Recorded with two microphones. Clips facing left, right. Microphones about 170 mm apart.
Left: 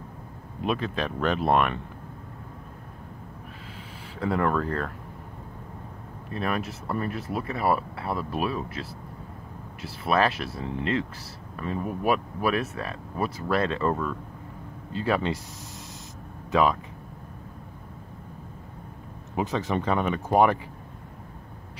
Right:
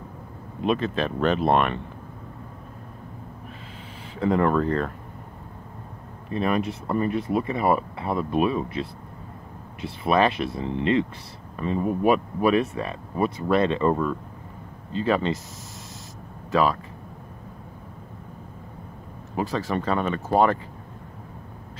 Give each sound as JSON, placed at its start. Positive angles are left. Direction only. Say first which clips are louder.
{"t": 0.7, "sound": "speech", "louder": "right 4 dB", "side_deg": 10}
{"t": 4.2, "sound": "speech", "louder": "right 4 dB", "side_deg": 0}
{"t": 6.3, "sound": "speech", "louder": "right 5 dB", "side_deg": 0}
{"t": 15.0, "sound": "speech", "louder": "right 3 dB", "side_deg": 10}
{"t": 19.3, "sound": "speech", "louder": "right 1 dB", "side_deg": 20}